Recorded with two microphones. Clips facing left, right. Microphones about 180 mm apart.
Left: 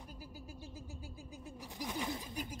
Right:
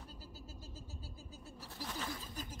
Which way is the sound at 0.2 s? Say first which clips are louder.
Left 3 dB; 15° left (ahead or behind).